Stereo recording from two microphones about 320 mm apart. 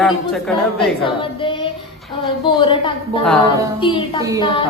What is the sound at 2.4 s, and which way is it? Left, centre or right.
A woman's voice, centre.